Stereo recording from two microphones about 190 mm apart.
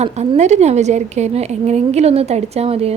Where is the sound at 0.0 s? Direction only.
35° right (ahead or behind).